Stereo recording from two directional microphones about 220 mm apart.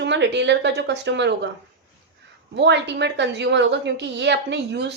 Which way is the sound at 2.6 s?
50° right (ahead or behind).